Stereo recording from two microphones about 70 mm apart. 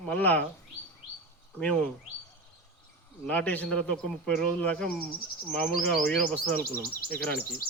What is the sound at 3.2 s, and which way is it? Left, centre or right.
Speech, centre.